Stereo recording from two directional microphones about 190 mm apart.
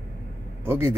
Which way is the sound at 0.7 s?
10° right (ahead or behind).